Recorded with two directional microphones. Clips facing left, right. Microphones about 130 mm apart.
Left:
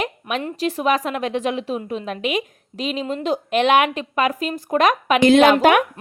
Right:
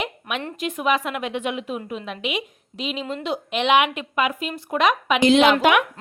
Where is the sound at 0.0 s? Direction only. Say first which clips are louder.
Left 4 dB; 35° left (ahead or behind).